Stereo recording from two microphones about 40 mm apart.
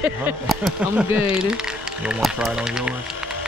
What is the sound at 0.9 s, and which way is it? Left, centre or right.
Speech, centre.